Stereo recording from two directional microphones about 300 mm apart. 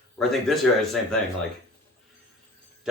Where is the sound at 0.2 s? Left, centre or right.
Centre.